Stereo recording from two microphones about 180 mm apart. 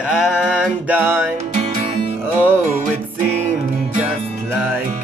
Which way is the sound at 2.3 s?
10° right (ahead or behind).